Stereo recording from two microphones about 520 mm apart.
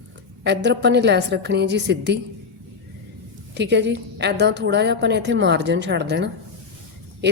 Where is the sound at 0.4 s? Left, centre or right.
Centre.